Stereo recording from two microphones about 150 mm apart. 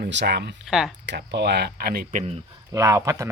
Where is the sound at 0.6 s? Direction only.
5° right (ahead or behind).